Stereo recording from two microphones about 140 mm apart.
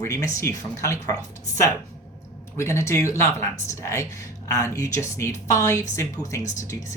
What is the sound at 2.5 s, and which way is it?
Speech, 20° left (ahead or behind).